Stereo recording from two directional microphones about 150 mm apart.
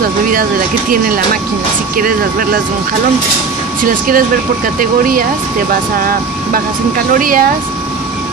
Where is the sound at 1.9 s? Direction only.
75° right (ahead or behind).